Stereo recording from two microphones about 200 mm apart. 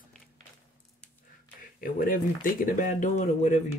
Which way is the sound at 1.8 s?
45° left (ahead or behind).